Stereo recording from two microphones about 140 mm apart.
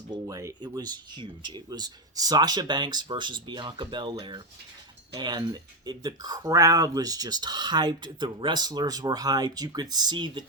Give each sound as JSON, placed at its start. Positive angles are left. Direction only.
{"t": 0.1, "sound": "speech", "side_deg": -25}